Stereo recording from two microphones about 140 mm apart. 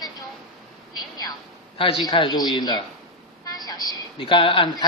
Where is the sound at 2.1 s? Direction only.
30° left (ahead or behind).